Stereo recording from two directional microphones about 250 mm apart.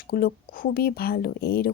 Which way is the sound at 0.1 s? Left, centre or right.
Left.